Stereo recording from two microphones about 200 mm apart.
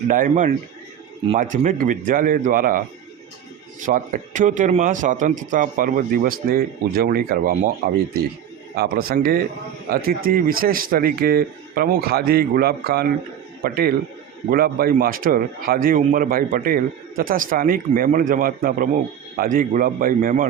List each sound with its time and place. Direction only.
0.1 s a man's voice: 40° right (ahead or behind)
8.7 s a man's voice: 50° right (ahead or behind)